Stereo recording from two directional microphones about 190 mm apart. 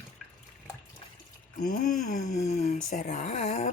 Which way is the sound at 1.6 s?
45° left (ahead or behind).